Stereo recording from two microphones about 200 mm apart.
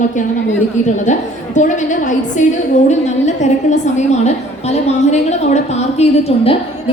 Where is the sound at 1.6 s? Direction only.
40° left (ahead or behind).